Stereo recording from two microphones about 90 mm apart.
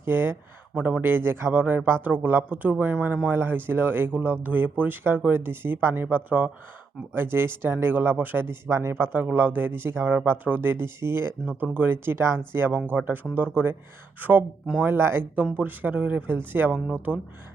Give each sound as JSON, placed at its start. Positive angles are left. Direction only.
{"t": 0.0, "sound": "a man's voice", "side_deg": -25}
{"t": 0.7, "sound": "a man's voice", "side_deg": -15}